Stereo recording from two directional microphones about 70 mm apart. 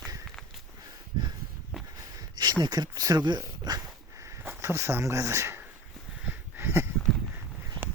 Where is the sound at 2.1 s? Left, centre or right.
Right.